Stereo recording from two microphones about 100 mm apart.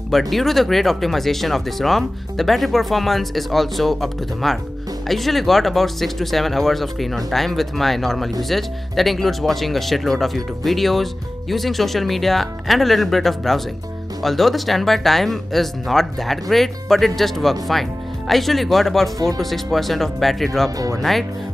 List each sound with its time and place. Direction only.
0.1 s speech: centre (ahead or behind)
20.7 s speech: 35° right (ahead or behind)
21.0 s speech: centre (ahead or behind)